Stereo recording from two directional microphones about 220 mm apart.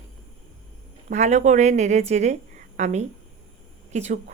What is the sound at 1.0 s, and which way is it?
Speech, 30° right (ahead or behind).